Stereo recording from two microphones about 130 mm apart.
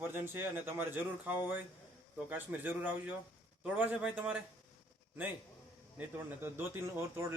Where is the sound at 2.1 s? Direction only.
10° right (ahead or behind).